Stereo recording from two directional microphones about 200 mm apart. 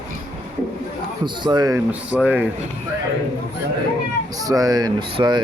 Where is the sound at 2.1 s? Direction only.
5° right (ahead or behind).